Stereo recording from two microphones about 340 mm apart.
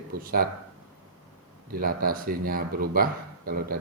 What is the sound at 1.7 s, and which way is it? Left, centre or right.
Speech, right.